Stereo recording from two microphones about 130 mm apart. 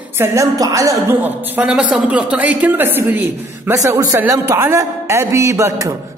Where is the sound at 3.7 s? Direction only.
25° right (ahead or behind).